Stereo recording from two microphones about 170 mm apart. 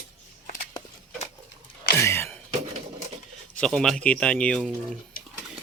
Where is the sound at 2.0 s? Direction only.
15° left (ahead or behind).